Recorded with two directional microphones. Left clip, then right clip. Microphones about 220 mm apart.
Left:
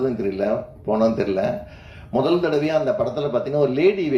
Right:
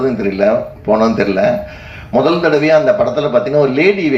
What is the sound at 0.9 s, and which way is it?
A man's voice, 55° left (ahead or behind).